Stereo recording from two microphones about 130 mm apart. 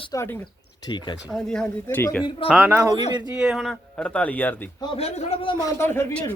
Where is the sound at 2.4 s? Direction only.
5° right (ahead or behind); by 4.5 s 10° left (ahead or behind).